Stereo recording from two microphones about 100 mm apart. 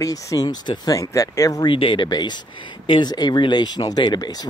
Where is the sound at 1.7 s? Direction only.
55° left (ahead or behind).